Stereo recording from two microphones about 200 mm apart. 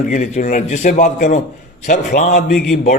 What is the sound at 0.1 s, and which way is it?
A man's voice, 40° left (ahead or behind).